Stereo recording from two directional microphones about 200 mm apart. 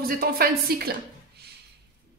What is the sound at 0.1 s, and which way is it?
Speech, 50° right (ahead or behind).